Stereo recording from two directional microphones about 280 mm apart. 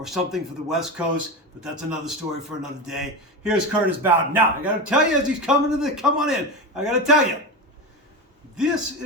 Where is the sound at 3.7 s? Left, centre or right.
Centre.